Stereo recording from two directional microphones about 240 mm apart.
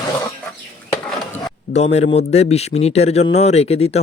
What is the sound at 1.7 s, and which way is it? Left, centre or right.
A man's voice, left.